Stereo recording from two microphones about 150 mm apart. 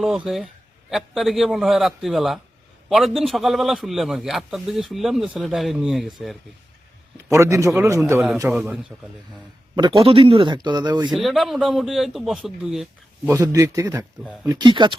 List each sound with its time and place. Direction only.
0.0 s a man's voice: centre (ahead or behind)
7.3 s speech: 20° right (ahead or behind)
8.5 s a man's voice: 5° right (ahead or behind)
9.7 s speech: 30° right (ahead or behind)
11.1 s a man's voice: centre (ahead or behind)
13.2 s speech: 15° right (ahead or behind); by 14.9 s 30° right (ahead or behind)